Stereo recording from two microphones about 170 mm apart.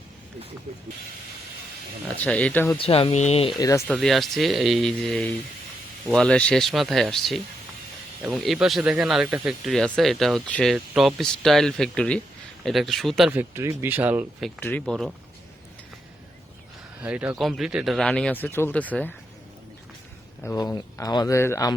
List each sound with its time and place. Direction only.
2.2 s speech: 10° left (ahead or behind)
2.7 s speech: 35° left (ahead or behind)
3.6 s speech: 20° left (ahead or behind)
3.8 s speech: 5° right (ahead or behind)
13.3 s speech: 15° right (ahead or behind)
14.6 s speech: 10° left (ahead or behind)
17.0 s speech: 10° right (ahead or behind); by 19.1 s 10° left (ahead or behind)
20.6 s speech: 25° left (ahead or behind)